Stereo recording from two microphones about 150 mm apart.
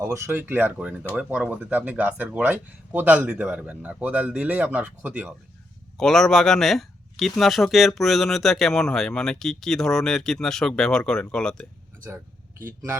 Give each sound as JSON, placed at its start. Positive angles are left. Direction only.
{"t": 0.0, "sound": "speech", "side_deg": -20}
{"t": 6.0, "sound": "speech", "side_deg": 5}
{"t": 12.6, "sound": "speech", "side_deg": -15}